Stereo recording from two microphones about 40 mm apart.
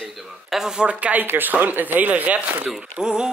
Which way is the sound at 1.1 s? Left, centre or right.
Right.